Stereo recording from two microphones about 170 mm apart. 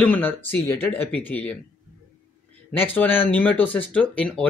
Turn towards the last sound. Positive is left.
turn(degrees=5)  # may be behind; listen again after turning